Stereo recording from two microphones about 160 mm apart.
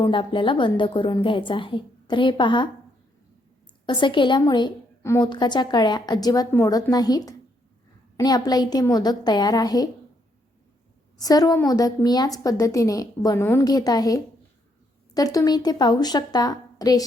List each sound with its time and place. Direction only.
0.0 s a woman's voice: 30° left (ahead or behind)
3.8 s a woman's voice: 30° left (ahead or behind)
11.2 s a woman's voice: 25° left (ahead or behind)